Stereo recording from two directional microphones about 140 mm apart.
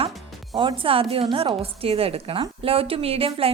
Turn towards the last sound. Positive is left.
turn(degrees=-45)  # may be behind; listen again after turning